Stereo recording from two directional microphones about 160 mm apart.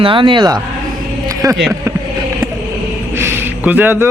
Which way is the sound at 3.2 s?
15° right (ahead or behind).